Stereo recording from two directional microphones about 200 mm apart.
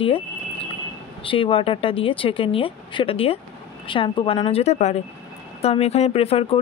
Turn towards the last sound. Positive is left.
turn(degrees=30)  # may be behind; listen again after turning